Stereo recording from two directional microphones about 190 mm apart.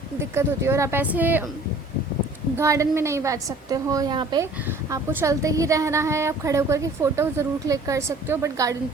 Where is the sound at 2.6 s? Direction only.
15° right (ahead or behind).